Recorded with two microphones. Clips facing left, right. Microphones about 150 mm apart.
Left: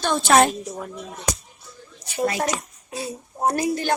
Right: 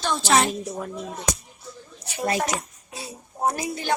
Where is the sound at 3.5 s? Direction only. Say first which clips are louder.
Left 10 dB; 55° left (ahead or behind).